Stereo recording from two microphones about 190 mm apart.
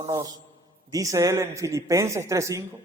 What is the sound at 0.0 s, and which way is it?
A man's voice, 20° right (ahead or behind).